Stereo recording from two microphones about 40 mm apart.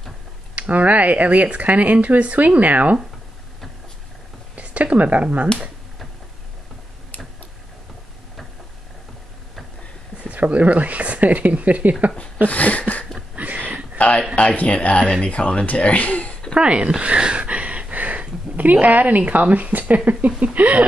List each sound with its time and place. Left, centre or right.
0.6 s speech: right
4.6 s speech: right
10.2 s speech: right
12.4 s speech: left
13.4 s a sound: right
13.9 s speech: left
16.5 s speech: right
17.2 s a sound: right
18.6 s a woman's voice: right